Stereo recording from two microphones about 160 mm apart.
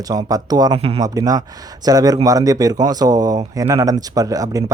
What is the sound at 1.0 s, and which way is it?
A man's voice, 20° right (ahead or behind).